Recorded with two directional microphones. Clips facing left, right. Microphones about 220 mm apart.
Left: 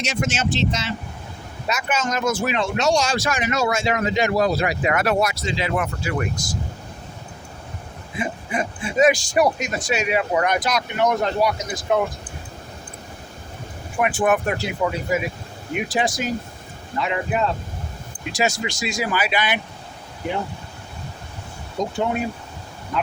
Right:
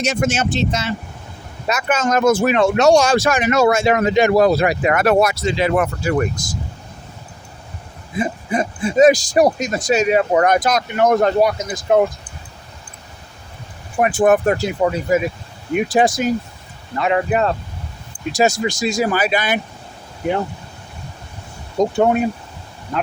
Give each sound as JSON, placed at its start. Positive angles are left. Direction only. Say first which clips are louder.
{"t": 0.0, "sound": "speech", "louder": "right 5 dB", "side_deg": -50}
{"t": 8.2, "sound": "speech", "louder": "right 5 dB", "side_deg": -40}
{"t": 14.0, "sound": "speech", "louder": "right 6 dB", "side_deg": -40}
{"t": 18.3, "sound": "speech", "louder": "right 6 dB", "side_deg": -45}
{"t": 21.8, "sound": "speech", "louder": "right 8 dB", "side_deg": -55}